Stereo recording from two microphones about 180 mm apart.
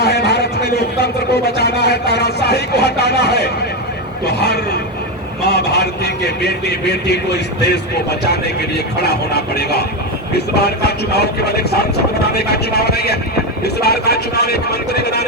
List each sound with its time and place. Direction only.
0.0 s a man's voice: 65° left (ahead or behind)